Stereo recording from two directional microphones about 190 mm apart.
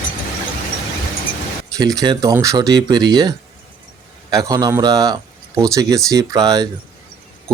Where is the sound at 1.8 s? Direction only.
20° right (ahead or behind).